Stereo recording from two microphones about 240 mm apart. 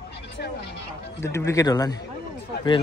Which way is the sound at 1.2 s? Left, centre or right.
Centre.